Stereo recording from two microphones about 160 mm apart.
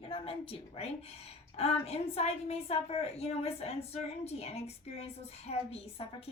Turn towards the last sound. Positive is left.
turn(degrees=40)  # may be behind; listen again after turning